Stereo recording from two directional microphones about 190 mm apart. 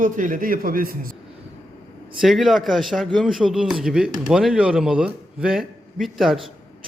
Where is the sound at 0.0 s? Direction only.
45° right (ahead or behind).